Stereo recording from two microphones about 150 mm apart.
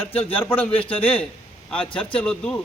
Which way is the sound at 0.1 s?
40° left (ahead or behind).